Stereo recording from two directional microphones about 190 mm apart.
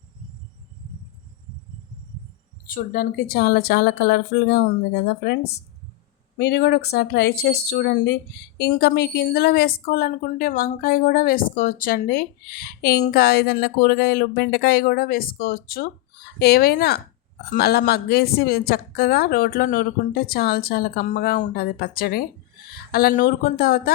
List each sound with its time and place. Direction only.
2.6 s a woman's voice: 50° left (ahead or behind)